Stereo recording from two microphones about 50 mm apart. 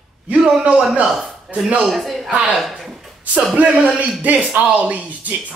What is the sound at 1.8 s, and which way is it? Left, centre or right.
Speech, centre.